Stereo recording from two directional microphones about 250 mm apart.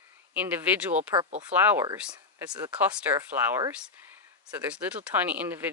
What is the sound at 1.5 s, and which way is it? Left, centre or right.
Speech, centre.